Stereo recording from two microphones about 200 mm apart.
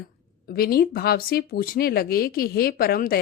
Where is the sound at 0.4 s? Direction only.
50° left (ahead or behind).